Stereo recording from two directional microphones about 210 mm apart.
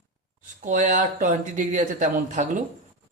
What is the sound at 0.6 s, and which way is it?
Speech, 35° right (ahead or behind).